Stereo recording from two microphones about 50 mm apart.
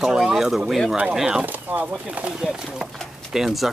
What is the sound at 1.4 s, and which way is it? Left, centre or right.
Speech, right.